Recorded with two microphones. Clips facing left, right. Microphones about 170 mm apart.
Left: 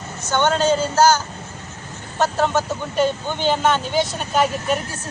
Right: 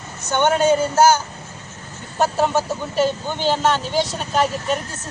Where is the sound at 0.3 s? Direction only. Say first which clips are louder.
Right 2 dB; 15° right (ahead or behind).